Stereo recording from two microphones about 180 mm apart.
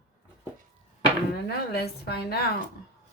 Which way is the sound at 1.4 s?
60° left (ahead or behind).